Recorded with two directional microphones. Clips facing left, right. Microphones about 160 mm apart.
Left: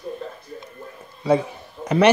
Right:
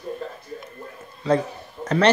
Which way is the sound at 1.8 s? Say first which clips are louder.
Left 2 dB; 10° left (ahead or behind).